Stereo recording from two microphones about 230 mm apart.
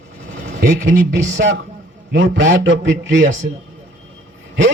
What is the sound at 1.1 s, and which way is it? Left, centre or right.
A man's voice, right.